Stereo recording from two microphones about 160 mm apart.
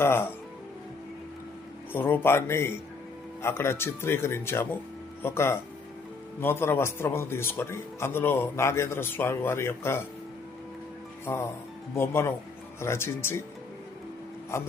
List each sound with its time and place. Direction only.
0.0 s a man's voice: 15° left (ahead or behind)
1.9 s a man's voice: 15° left (ahead or behind)
11.3 s a man's voice: 15° left (ahead or behind)